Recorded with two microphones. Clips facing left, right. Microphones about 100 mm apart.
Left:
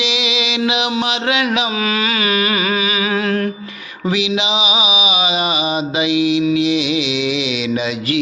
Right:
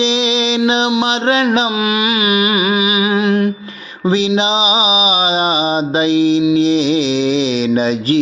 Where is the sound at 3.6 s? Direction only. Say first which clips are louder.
Right 4 dB; 35° right (ahead or behind).